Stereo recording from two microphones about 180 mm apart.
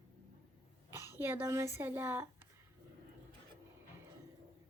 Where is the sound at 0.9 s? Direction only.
15° right (ahead or behind).